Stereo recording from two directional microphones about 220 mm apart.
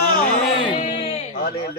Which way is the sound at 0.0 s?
40° left (ahead or behind).